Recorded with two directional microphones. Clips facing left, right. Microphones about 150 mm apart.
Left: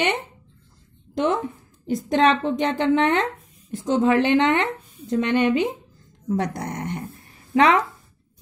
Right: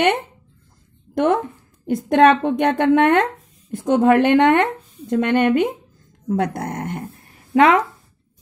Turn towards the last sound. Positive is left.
turn(degrees=-50)  # may be behind; listen again after turning